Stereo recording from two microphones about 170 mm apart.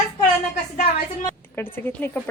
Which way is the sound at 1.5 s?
15° left (ahead or behind).